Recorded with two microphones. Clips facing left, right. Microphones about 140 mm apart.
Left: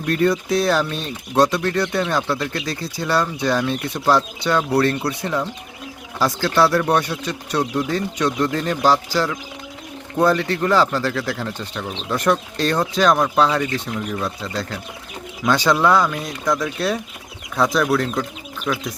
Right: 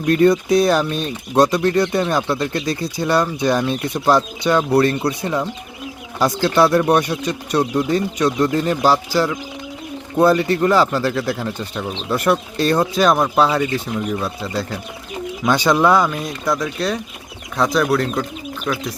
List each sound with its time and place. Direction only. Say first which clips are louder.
0.1 s speech: right 5 dB; 20° right (ahead or behind)